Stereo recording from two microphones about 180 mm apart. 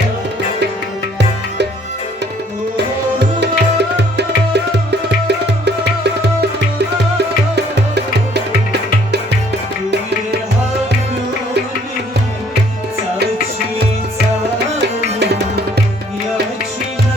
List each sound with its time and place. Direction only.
2.7 s music: 70° right (ahead or behind)
7.5 s music: 70° right (ahead or behind)
15.2 s music: 65° right (ahead or behind)